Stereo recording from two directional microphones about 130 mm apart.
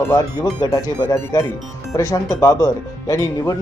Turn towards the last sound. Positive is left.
turn(degrees=25)  # may be behind; listen again after turning